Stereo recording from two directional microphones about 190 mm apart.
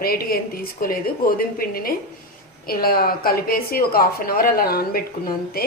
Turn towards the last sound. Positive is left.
turn(degrees=50)  # may be behind; listen again after turning